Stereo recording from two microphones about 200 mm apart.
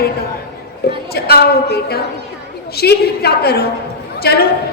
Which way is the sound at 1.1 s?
50° left (ahead or behind).